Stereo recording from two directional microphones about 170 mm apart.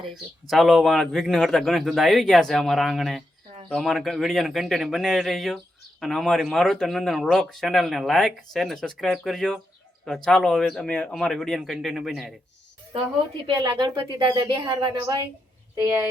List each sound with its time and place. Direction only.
0.4 s speech: centre (ahead or behind)
13.6 s speech: 25° right (ahead or behind)